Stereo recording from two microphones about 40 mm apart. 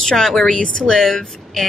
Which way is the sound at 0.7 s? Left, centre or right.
Left.